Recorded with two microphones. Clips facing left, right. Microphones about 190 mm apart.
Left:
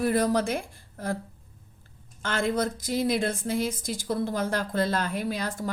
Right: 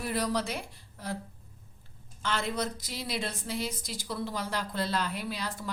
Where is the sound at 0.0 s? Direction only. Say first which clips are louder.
Left 7 dB; 50° left (ahead or behind).